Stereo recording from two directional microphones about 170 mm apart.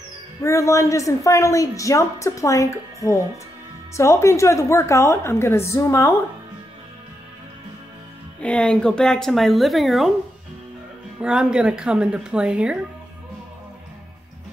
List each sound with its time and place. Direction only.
0.4 s a woman's voice: 15° left (ahead or behind)
8.4 s speech: 5° left (ahead or behind)
11.1 s speech: 5° right (ahead or behind)